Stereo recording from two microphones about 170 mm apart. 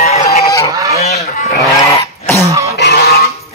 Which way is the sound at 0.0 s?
40° left (ahead or behind).